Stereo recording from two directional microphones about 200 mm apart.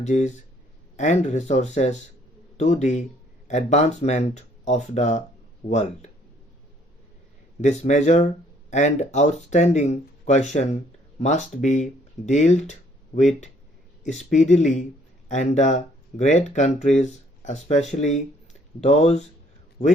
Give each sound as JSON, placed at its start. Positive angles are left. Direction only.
{"t": 0.0, "sound": "speech", "side_deg": 35}
{"t": 7.6, "sound": "speech", "side_deg": 35}